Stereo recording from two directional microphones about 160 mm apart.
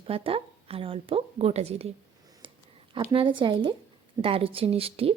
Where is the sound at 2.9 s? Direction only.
30° right (ahead or behind).